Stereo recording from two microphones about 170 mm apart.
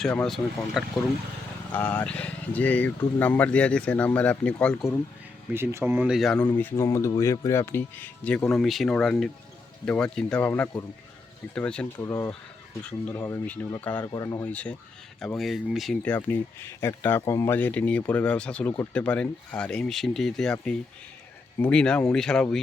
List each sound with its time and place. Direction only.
0.2 s speech: centre (ahead or behind)
5.5 s speech: 10° right (ahead or behind)
6.1 s speech: 5° left (ahead or behind)
12.0 s speech: 20° left (ahead or behind)
14.4 s speech: 10° left (ahead or behind)